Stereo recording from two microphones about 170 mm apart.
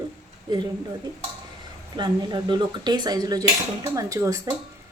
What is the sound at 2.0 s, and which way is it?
A woman's voice, 25° right (ahead or behind).